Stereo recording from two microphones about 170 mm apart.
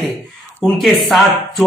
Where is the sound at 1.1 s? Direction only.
Centre (ahead or behind).